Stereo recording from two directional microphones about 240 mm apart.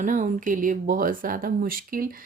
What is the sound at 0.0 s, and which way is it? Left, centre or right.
A woman's voice, right.